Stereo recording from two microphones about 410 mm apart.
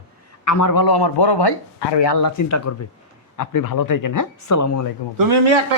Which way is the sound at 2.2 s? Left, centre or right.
Left.